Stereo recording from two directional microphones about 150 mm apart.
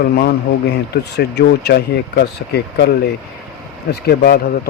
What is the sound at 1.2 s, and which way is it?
A man's voice, 90° left.